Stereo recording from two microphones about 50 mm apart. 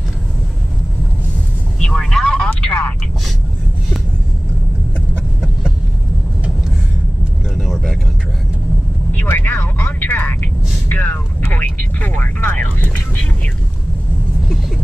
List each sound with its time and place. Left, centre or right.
1.8 s vehicle: centre
2.2 s a sound: centre
7.5 s vehicle: centre
9.3 s vehicle: left
12.5 s vehicle: left